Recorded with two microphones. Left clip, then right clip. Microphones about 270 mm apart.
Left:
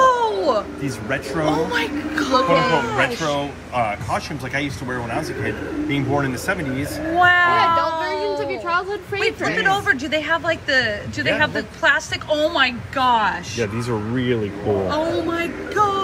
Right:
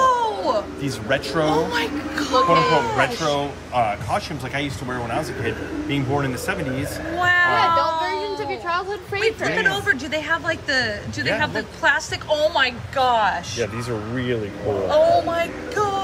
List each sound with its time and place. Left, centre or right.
0.0 s speech: centre
8.4 s a sound: left
9.2 s speech: centre
14.9 s speech: centre